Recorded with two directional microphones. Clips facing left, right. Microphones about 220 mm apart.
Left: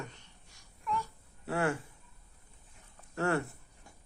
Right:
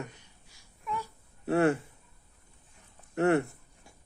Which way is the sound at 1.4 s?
25° right (ahead or behind).